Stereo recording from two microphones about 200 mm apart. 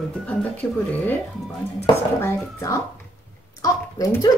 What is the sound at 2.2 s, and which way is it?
Speech, 15° left (ahead or behind).